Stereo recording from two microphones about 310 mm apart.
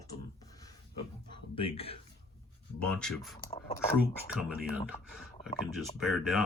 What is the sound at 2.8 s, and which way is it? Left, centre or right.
Speech, centre.